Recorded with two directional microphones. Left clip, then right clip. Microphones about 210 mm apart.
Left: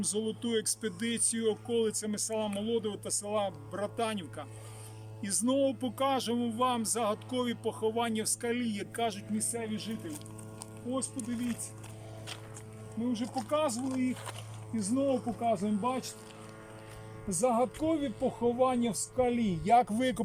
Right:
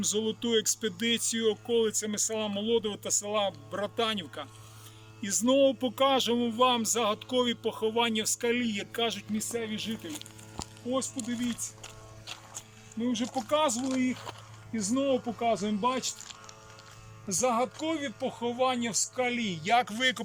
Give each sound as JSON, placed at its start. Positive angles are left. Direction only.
{"t": 0.0, "sound": "speech", "side_deg": 0}
{"t": 13.1, "sound": "speech", "side_deg": 5}
{"t": 17.2, "sound": "a man's voice", "side_deg": 15}